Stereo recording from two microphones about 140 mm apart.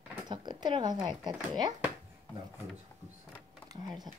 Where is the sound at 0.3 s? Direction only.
35° right (ahead or behind).